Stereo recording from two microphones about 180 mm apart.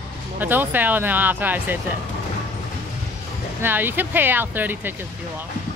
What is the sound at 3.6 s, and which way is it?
Speech, 10° right (ahead or behind).